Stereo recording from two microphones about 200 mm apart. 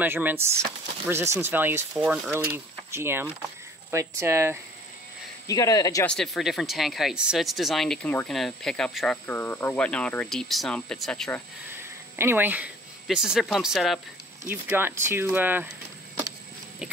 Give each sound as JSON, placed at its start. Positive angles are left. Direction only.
{"t": 0.0, "sound": "speech", "side_deg": -10}
{"t": 5.5, "sound": "speech", "side_deg": 15}
{"t": 6.0, "sound": "speech", "side_deg": 0}
{"t": 12.2, "sound": "speech", "side_deg": -10}